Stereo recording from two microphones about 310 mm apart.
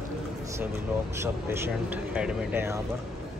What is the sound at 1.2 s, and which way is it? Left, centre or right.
Speech, centre.